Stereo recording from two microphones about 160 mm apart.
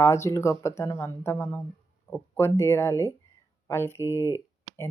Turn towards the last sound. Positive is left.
turn(degrees=20)  # may be behind; listen again after turning